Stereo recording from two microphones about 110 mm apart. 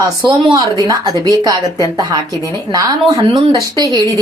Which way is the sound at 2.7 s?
30° right (ahead or behind).